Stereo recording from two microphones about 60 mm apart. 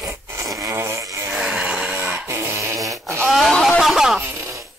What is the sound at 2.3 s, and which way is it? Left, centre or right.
Fart, right.